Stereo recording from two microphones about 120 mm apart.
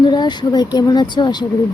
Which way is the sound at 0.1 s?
40° left (ahead or behind).